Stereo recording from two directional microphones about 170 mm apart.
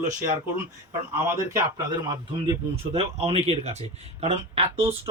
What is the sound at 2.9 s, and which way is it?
Speech, 35° right (ahead or behind).